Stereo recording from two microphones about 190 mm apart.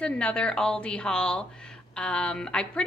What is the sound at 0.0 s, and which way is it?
A woman's voice, 5° left (ahead or behind).